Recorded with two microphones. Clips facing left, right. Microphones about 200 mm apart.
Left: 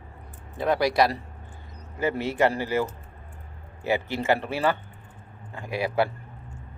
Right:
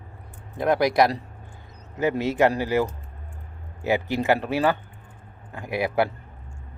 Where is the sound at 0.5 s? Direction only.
15° right (ahead or behind).